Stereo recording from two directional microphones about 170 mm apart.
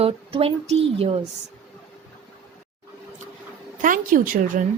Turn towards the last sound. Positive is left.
turn(degrees=-55)  # may be behind; listen again after turning